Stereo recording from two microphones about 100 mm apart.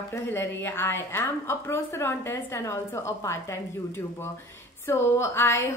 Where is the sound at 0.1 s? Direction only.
25° left (ahead or behind).